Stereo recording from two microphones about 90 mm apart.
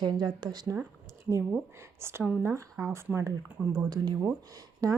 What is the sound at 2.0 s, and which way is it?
A woman's voice, 30° right (ahead or behind).